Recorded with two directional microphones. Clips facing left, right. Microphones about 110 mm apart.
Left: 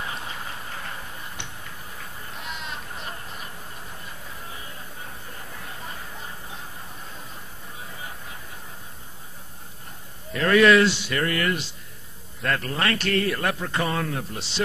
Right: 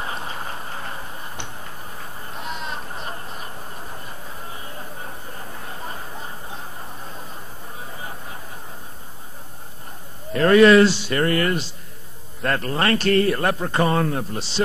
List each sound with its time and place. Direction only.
0.0 s tick-tock: 35° right (ahead or behind)
4.7 s a sound: 35° right (ahead or behind)
10.3 s a man's voice: 35° right (ahead or behind)